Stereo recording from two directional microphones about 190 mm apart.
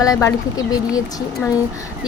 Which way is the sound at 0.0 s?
15° left (ahead or behind).